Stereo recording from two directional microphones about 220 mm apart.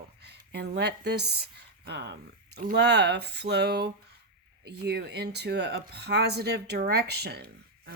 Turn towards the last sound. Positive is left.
turn(degrees=-45)  # may be behind; listen again after turning